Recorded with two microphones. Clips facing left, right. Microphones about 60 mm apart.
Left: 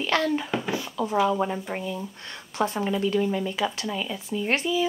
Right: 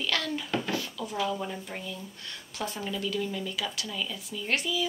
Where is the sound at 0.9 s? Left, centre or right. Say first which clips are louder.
Left 8 dB; left.